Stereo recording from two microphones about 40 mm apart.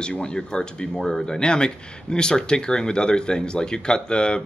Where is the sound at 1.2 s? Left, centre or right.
Left.